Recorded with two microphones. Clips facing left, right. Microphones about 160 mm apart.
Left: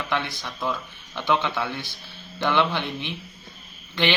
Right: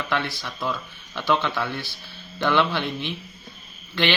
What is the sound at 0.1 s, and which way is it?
A man's voice, 20° left (ahead or behind).